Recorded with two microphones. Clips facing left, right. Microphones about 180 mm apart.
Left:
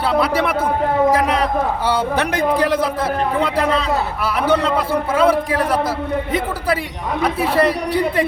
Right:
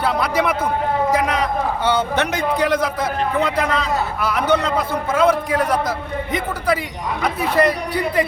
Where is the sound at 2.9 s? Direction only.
30° left (ahead or behind).